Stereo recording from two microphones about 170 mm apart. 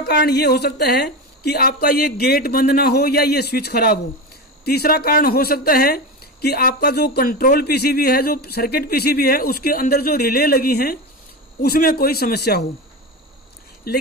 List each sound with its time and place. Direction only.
0.0 s a woman's voice: 70° left (ahead or behind)
13.9 s speech: 60° left (ahead or behind)